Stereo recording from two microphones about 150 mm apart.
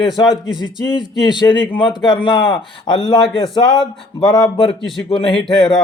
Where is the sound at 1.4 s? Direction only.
30° left (ahead or behind).